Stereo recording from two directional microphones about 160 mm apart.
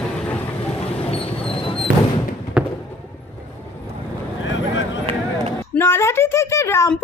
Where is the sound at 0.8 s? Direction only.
40° left (ahead or behind).